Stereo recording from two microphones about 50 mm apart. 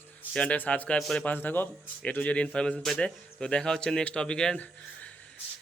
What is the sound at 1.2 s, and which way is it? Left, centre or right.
Speech, left.